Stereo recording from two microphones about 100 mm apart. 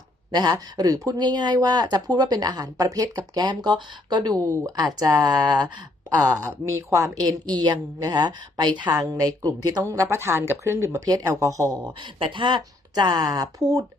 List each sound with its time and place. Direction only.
0.3 s speech: 45° right (ahead or behind)
6.2 s speech: 30° right (ahead or behind); by 8.9 s 50° right (ahead or behind)
8.9 s a woman's voice: 35° right (ahead or behind)
9.9 s speech: 30° right (ahead or behind)
12.2 s speech: 55° right (ahead or behind); by 13.8 s 35° right (ahead or behind)